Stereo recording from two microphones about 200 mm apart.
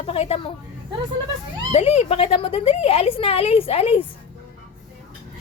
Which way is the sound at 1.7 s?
30° left (ahead or behind).